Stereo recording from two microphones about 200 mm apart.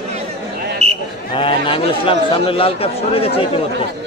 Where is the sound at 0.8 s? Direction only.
30° right (ahead or behind).